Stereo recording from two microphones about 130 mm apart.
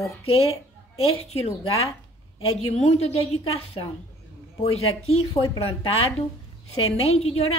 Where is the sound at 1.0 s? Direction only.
50° left (ahead or behind).